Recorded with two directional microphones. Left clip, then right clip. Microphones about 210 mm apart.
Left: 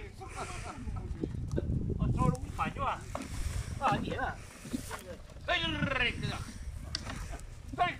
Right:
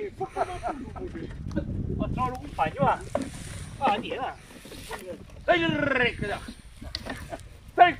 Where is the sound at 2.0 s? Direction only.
40° right (ahead or behind).